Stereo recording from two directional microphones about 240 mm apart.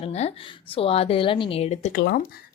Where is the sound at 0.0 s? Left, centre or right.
Left.